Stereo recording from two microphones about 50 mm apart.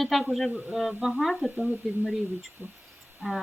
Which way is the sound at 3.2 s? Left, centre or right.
Centre.